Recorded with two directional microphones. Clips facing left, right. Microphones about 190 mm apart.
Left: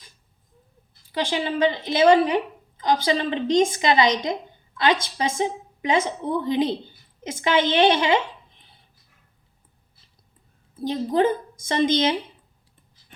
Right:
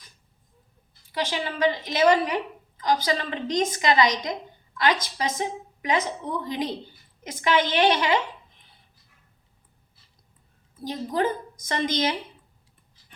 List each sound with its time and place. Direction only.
1.1 s a woman's voice: 30° left (ahead or behind)
10.8 s a woman's voice: 25° left (ahead or behind)